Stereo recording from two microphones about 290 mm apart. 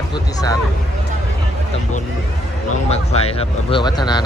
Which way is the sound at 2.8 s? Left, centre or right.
Left.